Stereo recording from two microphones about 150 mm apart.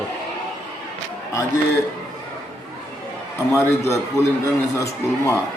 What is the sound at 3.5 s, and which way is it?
A man's voice, 20° left (ahead or behind).